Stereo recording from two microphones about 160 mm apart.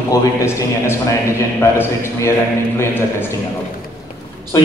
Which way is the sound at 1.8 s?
15° left (ahead or behind).